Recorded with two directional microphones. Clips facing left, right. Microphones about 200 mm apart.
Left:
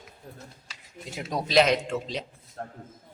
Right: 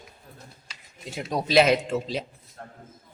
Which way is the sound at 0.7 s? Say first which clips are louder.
Right 2 dB; centre (ahead or behind).